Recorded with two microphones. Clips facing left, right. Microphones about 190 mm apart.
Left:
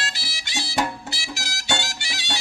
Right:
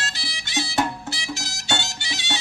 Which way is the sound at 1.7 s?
20° right (ahead or behind).